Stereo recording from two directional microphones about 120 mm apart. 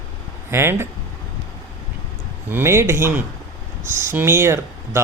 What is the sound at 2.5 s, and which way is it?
Speech, 20° right (ahead or behind).